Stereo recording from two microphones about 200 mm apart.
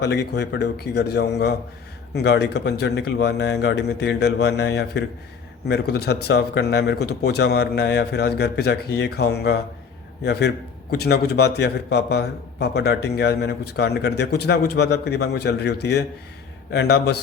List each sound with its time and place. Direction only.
0.0 s a man's voice: 55° left (ahead or behind)
10.9 s a man's voice: 50° left (ahead or behind)